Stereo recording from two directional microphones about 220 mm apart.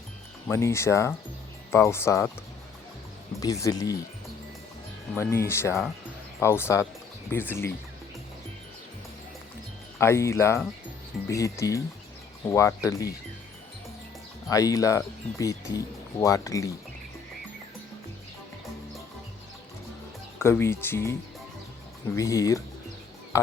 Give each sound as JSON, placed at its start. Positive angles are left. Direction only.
{"t": 0.4, "sound": "speech", "side_deg": 10}
{"t": 3.4, "sound": "speech", "side_deg": 15}
{"t": 5.2, "sound": "speech", "side_deg": 10}
{"t": 10.0, "sound": "speech", "side_deg": 10}
{"t": 14.5, "sound": "speech", "side_deg": 15}
{"t": 20.4, "sound": "speech", "side_deg": 10}